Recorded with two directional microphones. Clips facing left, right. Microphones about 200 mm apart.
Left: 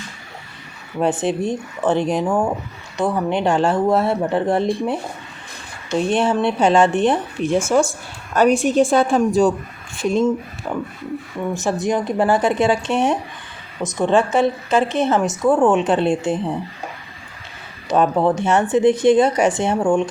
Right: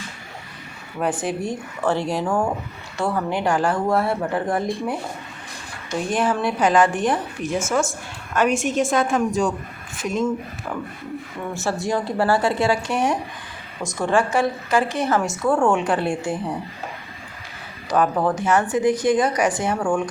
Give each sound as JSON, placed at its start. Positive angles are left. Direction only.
{"t": 0.9, "sound": "a woman's voice", "side_deg": 25}
{"t": 17.8, "sound": "a woman's voice", "side_deg": 25}